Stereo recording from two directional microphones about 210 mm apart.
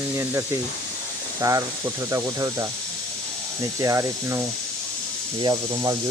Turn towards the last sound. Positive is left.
turn(degrees=-20)  # may be behind; listen again after turning